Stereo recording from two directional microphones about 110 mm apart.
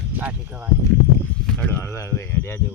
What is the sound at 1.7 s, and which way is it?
Speech, 20° left (ahead or behind).